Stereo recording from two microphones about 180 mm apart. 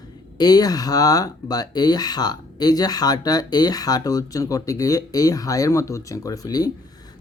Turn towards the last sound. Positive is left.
turn(degrees=20)  # may be behind; listen again after turning